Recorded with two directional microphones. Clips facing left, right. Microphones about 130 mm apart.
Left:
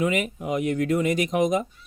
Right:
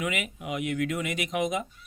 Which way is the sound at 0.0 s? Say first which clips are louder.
Left 7 dB; 35° left (ahead or behind).